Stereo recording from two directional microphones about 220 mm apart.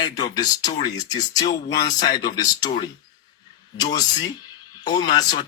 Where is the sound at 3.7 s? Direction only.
15° left (ahead or behind).